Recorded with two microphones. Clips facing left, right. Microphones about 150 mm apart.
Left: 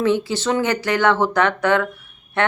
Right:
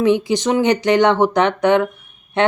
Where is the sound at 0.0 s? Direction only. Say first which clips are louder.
Right 4 dB; 15° right (ahead or behind).